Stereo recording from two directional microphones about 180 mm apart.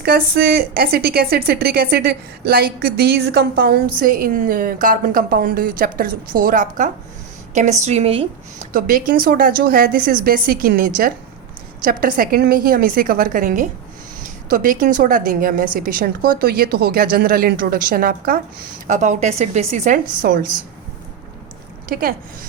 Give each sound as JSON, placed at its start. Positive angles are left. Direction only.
{"t": 0.0, "sound": "a woman's voice", "side_deg": -60}
{"t": 8.7, "sound": "a woman's voice", "side_deg": -50}